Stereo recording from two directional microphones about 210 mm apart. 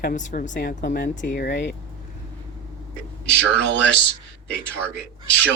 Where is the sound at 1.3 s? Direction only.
55° left (ahead or behind).